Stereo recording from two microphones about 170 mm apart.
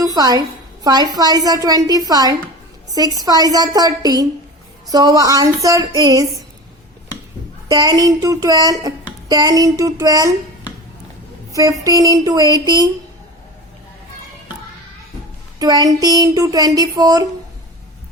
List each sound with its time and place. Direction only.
0.0 s a woman's voice: 20° right (ahead or behind)
7.7 s speech: 20° right (ahead or behind)
11.5 s speech: 20° right (ahead or behind)
15.5 s speech: 20° right (ahead or behind)